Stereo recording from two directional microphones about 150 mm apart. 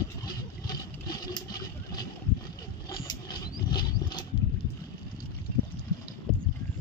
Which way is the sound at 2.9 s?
30° left (ahead or behind).